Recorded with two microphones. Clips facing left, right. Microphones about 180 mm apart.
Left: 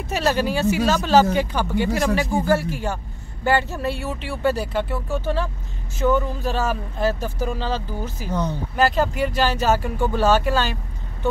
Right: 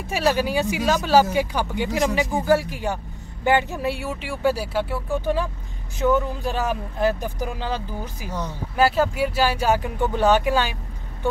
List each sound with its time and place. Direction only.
0.1 s speech: 10° right (ahead or behind)
6.0 s speech: centre (ahead or behind)
6.4 s speech: 15° right (ahead or behind)